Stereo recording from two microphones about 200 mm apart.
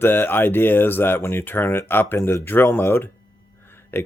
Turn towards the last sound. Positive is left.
turn(degrees=10)  # may be behind; listen again after turning